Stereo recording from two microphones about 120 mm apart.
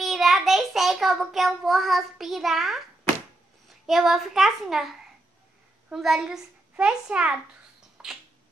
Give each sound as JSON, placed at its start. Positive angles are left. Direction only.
{"t": 0.0, "sound": "child singing", "side_deg": 0}
{"t": 3.6, "sound": "a child's voice", "side_deg": 0}
{"t": 8.0, "sound": "a sound", "side_deg": -5}